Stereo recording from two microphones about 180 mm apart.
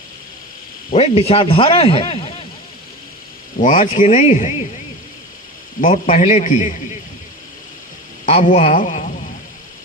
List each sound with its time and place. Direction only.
0.9 s a man's voice: 35° left (ahead or behind)
3.6 s a man's voice: 45° left (ahead or behind)
6.1 s a man's voice: 40° left (ahead or behind)
8.3 s a man's voice: 40° left (ahead or behind)